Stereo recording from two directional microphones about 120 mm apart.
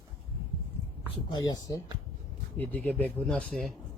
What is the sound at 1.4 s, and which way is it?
Speech, 30° left (ahead or behind).